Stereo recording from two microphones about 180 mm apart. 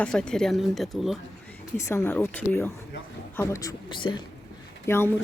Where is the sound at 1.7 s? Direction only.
15° left (ahead or behind).